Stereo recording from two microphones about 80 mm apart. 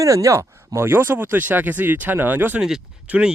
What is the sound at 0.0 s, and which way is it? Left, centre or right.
Speech, right.